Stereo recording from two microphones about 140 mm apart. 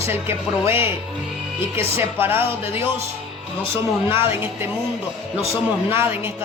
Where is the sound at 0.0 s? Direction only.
15° right (ahead or behind).